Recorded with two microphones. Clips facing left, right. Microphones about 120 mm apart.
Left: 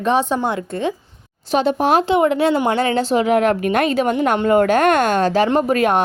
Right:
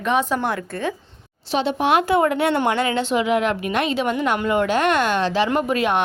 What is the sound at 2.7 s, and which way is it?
A woman's voice, 35° left (ahead or behind).